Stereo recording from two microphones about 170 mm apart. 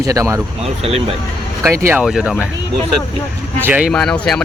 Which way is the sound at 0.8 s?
35° right (ahead or behind).